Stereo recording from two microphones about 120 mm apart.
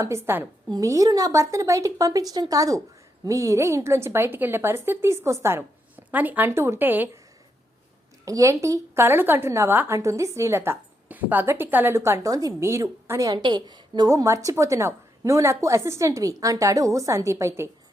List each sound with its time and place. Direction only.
0.0 s a woman's voice: 25° right (ahead or behind)
8.2 s a woman's voice: 30° right (ahead or behind)